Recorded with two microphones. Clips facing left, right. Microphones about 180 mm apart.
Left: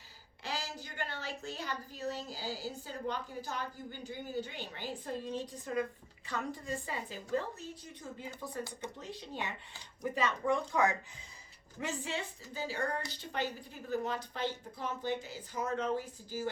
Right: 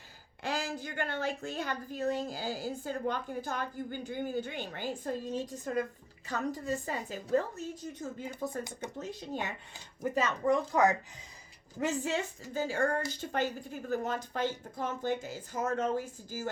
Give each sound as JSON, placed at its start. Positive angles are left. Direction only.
{"t": 0.4, "sound": "a woman's voice", "side_deg": -50}